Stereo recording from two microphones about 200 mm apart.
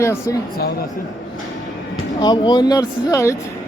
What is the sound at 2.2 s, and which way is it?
Speech, 20° left (ahead or behind).